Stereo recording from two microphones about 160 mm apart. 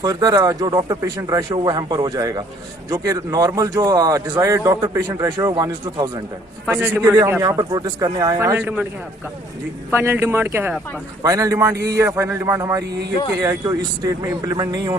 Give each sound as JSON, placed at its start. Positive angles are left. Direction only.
{"t": 0.0, "sound": "speech", "side_deg": -25}
{"t": 6.7, "sound": "a man's voice", "side_deg": -10}
{"t": 9.9, "sound": "a man's voice", "side_deg": -15}